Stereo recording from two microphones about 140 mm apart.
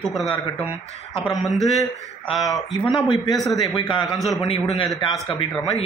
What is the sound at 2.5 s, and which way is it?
Speech, 30° left (ahead or behind).